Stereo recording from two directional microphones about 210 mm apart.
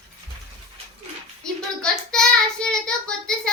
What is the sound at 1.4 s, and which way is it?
Hands, 5° left (ahead or behind).